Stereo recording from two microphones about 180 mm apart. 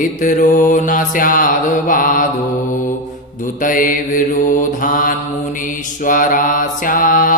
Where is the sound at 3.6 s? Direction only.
50° left (ahead or behind).